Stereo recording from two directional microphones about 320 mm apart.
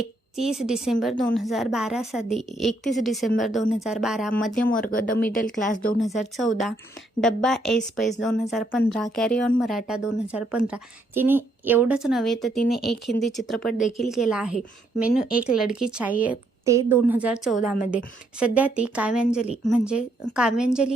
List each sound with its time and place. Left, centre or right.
0.3 s a woman's voice: centre
4.6 s speech: left
6.0 s a woman's voice: centre